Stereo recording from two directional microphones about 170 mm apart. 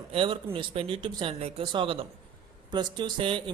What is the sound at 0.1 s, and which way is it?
Speech, 30° right (ahead or behind).